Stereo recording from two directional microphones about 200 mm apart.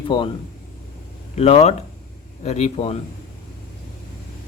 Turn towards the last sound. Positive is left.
turn(degrees=30)  # may be behind; listen again after turning